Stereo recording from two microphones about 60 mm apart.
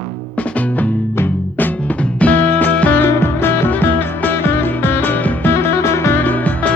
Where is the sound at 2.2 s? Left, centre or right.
Left.